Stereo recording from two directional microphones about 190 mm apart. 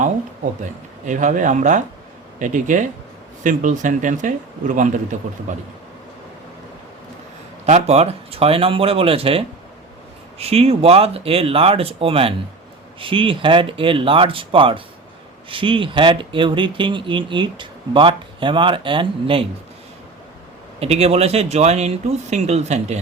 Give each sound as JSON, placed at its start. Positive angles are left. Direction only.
{"t": 0.6, "sound": "speech", "side_deg": -40}
{"t": 7.6, "sound": "speech", "side_deg": -35}
{"t": 20.7, "sound": "speech", "side_deg": -35}